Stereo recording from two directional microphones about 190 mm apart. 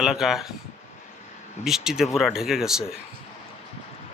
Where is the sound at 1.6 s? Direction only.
Centre (ahead or behind).